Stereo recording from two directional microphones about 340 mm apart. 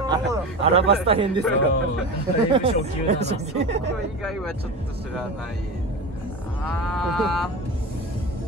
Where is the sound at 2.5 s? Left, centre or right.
Centre.